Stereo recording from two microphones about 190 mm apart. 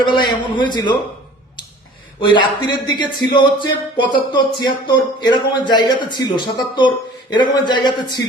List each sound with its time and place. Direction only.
0.0 s a man's voice: 25° left (ahead or behind)
2.2 s a man's voice: 25° left (ahead or behind)